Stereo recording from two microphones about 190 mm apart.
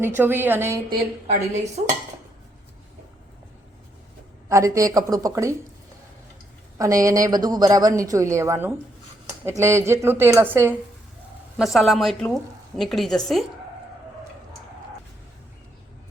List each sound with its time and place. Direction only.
0.0 s a woman's voice: 10° right (ahead or behind)
1.3 s speech: 35° right (ahead or behind)
4.4 s a woman's voice: 15° right (ahead or behind)
6.7 s a woman's voice: 15° right (ahead or behind)
11.5 s a woman's voice: centre (ahead or behind)